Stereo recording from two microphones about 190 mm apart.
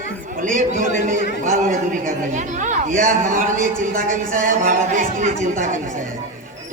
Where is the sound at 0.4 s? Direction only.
45° right (ahead or behind).